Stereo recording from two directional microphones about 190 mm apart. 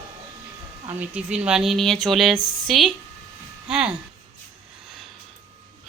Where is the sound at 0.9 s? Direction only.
5° right (ahead or behind).